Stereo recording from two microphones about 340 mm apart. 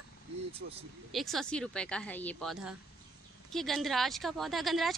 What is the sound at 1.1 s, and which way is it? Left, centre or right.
Speech, centre.